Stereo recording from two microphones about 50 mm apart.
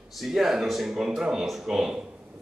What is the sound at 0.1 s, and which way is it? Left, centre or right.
A man's voice, centre.